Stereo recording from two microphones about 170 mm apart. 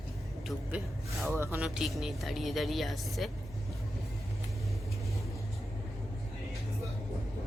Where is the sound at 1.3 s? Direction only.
15° right (ahead or behind).